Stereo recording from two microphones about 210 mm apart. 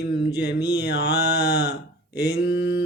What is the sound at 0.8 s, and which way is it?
Mantra, 50° left (ahead or behind).